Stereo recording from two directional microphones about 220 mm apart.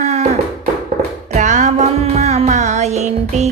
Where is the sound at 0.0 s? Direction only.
30° right (ahead or behind).